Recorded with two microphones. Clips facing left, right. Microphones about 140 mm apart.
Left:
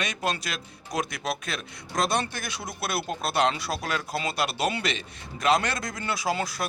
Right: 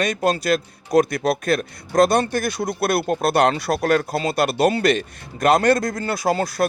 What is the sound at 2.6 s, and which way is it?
A man's voice, 60° right (ahead or behind).